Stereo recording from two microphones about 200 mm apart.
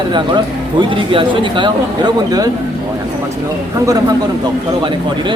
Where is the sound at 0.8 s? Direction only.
25° right (ahead or behind).